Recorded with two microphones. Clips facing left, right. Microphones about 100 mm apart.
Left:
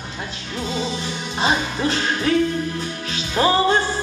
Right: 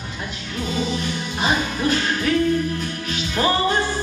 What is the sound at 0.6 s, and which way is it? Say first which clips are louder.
Music: right 1 dB; 25° left (ahead or behind).